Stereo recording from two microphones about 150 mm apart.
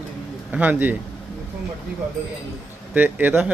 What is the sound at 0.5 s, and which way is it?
Speech, 10° right (ahead or behind).